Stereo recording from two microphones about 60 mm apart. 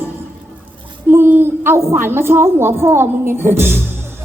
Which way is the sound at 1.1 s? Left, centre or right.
Right.